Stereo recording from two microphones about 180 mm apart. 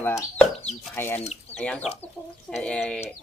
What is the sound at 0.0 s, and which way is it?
Speech, 20° left (ahead or behind).